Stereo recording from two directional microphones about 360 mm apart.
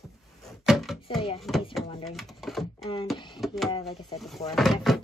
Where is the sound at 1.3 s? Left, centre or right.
Centre.